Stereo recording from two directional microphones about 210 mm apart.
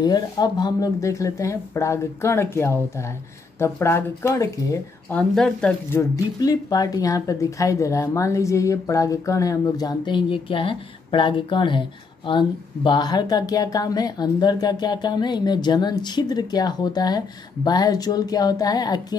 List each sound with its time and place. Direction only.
0.0 s speech: 20° left (ahead or behind)